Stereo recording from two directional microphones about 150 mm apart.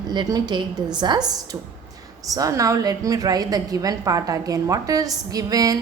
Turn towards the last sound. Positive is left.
turn(degrees=-25)  # may be behind; listen again after turning